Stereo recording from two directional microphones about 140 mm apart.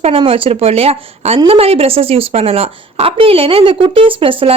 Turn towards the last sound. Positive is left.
turn(degrees=-40)  # may be behind; listen again after turning